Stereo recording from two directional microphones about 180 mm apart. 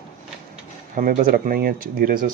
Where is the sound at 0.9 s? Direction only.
50° right (ahead or behind).